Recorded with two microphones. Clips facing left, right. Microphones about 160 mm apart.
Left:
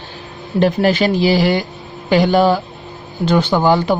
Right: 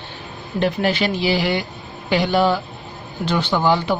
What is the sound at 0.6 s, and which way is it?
A man's voice, 40° left (ahead or behind).